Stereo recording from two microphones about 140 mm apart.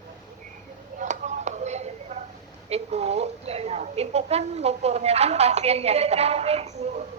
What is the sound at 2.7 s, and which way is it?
A woman's voice, 50° right (ahead or behind).